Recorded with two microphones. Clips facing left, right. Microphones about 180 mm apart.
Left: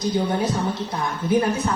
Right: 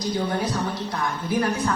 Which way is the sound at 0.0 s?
25° left (ahead or behind).